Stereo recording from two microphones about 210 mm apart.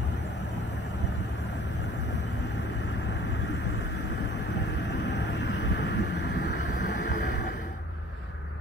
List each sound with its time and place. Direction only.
5.0 s vehicle: 60° left (ahead or behind)